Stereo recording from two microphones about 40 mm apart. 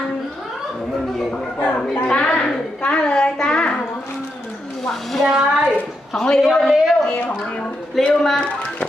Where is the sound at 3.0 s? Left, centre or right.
Centre.